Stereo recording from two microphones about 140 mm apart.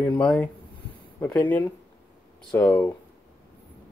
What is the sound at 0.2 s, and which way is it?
Speech, 5° left (ahead or behind).